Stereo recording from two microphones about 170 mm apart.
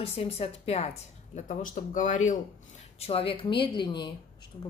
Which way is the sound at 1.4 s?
50° left (ahead or behind).